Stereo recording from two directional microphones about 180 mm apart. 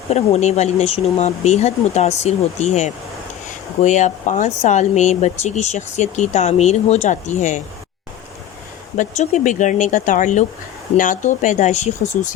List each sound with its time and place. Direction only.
0.1 s speech: 35° left (ahead or behind)
9.0 s speech: 45° left (ahead or behind)